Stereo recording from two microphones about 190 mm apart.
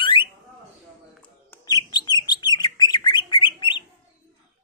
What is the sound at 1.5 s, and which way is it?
Bird, 20° left (ahead or behind).